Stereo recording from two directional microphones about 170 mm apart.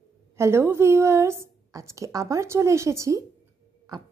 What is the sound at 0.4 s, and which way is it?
A woman's voice, 15° right (ahead or behind).